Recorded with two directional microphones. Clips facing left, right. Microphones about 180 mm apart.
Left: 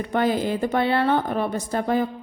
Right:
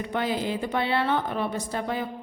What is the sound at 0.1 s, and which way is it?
A woman's voice, 45° left (ahead or behind).